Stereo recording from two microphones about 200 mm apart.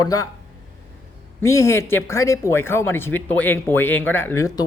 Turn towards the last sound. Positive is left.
turn(degrees=15)  # may be behind; listen again after turning